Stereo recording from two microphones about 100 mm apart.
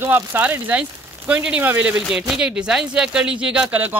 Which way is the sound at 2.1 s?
5° right (ahead or behind).